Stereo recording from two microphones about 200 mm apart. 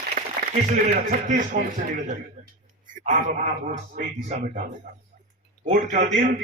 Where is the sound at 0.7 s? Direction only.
40° right (ahead or behind).